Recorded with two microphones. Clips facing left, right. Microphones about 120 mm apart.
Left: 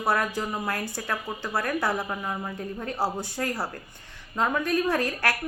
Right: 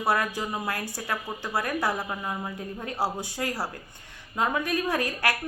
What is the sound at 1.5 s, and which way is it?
A woman's voice, 10° right (ahead or behind).